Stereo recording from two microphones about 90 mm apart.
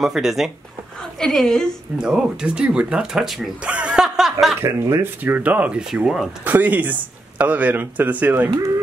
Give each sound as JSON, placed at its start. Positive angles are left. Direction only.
{"t": 0.0, "sound": "speech", "side_deg": -5}
{"t": 2.0, "sound": "speech", "side_deg": -10}
{"t": 3.6, "sound": "snicker", "side_deg": -10}
{"t": 4.6, "sound": "speech", "side_deg": -35}
{"t": 5.2, "sound": "speech", "side_deg": -20}
{"t": 6.4, "sound": "speech", "side_deg": -20}